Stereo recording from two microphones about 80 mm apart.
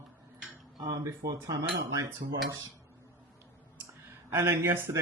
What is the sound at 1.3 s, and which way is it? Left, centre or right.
Speech, right.